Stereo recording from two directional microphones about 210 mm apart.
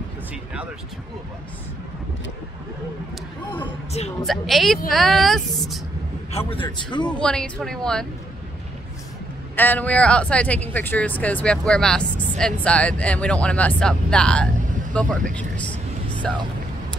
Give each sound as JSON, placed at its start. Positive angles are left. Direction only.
{"t": 3.6, "sound": "a woman's voice", "side_deg": 30}
{"t": 4.3, "sound": "speech", "side_deg": 0}
{"t": 6.3, "sound": "a man's voice", "side_deg": 25}
{"t": 7.1, "sound": "speech", "side_deg": 5}
{"t": 9.6, "sound": "speech", "side_deg": 10}